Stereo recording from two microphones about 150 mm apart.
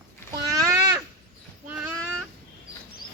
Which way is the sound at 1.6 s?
10° right (ahead or behind).